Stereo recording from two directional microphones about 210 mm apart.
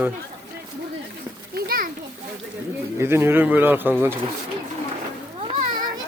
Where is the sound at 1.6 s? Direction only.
45° right (ahead or behind).